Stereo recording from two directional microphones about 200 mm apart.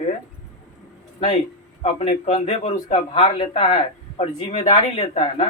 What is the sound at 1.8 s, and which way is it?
A man's voice, 30° left (ahead or behind).